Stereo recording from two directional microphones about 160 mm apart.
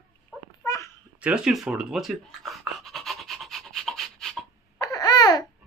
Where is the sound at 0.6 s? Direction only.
20° left (ahead or behind).